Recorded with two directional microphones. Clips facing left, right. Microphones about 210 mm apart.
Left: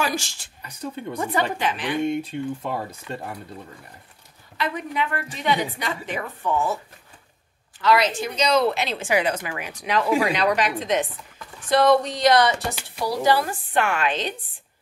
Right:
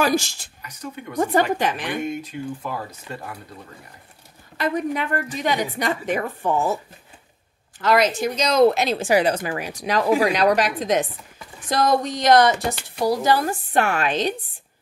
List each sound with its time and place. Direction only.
0.0 s a woman's voice: 40° right (ahead or behind)
0.6 s speech: 30° left (ahead or behind)
1.2 s a woman's voice: 45° right (ahead or behind)
2.0 s speech: 30° left (ahead or behind)
4.6 s a woman's voice: 45° right (ahead or behind)
7.8 s a woman's voice: 45° right (ahead or behind)